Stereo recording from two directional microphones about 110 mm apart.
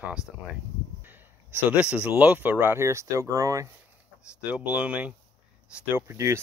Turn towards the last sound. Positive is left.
turn(degrees=-25)  # may be behind; listen again after turning